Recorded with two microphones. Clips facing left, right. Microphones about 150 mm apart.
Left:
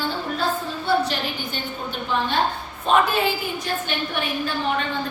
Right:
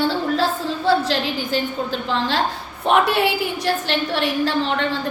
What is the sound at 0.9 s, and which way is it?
A woman's voice, 90° right.